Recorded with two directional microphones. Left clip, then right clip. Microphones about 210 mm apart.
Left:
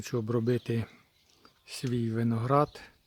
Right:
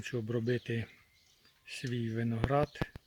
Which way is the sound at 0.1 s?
15° left (ahead or behind).